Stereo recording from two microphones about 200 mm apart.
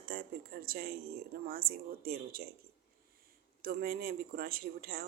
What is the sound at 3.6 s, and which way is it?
Speech, 50° right (ahead or behind).